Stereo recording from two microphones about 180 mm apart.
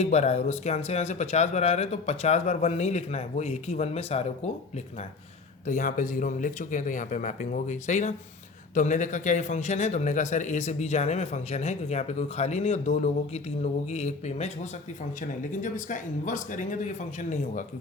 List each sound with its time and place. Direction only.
0.0 s a man's voice: 35° left (ahead or behind)
5.6 s a man's voice: 45° left (ahead or behind)